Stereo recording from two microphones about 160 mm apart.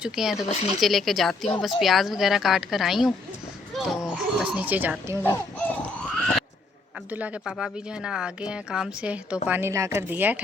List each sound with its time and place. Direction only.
0.0 s speech: 5° right (ahead or behind)
0.4 s speech: 45° left (ahead or behind)
0.8 s speech: centre (ahead or behind)
5.2 s speech: 15° left (ahead or behind)
6.1 s a sound: 10° left (ahead or behind)
7.1 s speech: 10° right (ahead or behind)